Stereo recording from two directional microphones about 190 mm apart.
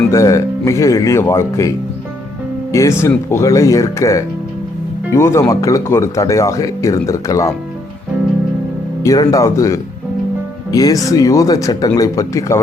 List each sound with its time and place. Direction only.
0.1 s speech: 15° left (ahead or behind)
2.7 s speech: 15° left (ahead or behind)
9.0 s speech: 20° left (ahead or behind)